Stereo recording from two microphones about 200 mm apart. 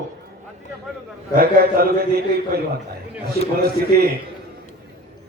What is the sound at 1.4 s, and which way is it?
Speech, 45° right (ahead or behind).